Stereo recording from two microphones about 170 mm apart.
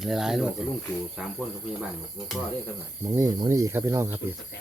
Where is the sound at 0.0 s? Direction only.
5° right (ahead or behind).